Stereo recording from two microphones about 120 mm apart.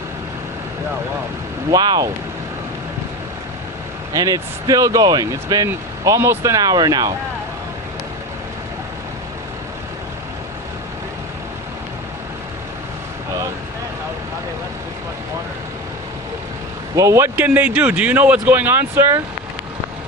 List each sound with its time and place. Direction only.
1.7 s speech: 30° right (ahead or behind)
4.1 s speech: 30° right (ahead or behind)
5.6 s speech: 20° right (ahead or behind)
16.9 s speech: 25° right (ahead or behind)
17.3 s speech: 15° right (ahead or behind)